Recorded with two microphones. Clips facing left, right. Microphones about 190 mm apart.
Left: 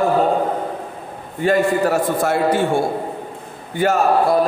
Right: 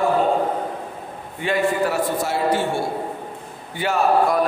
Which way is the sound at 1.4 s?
45° left (ahead or behind).